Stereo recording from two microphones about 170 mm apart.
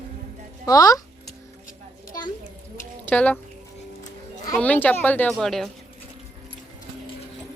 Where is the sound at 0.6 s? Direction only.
20° left (ahead or behind).